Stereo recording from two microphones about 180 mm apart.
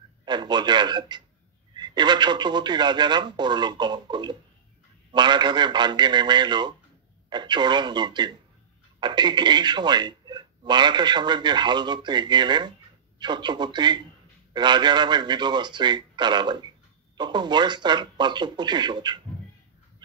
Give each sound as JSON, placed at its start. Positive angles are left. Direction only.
{"t": 0.2, "sound": "a man's voice", "side_deg": -25}